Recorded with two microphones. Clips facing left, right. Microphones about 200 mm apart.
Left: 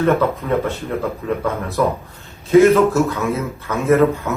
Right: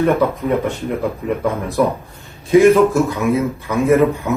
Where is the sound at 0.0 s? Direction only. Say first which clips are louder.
Right 1 dB; 15° right (ahead or behind).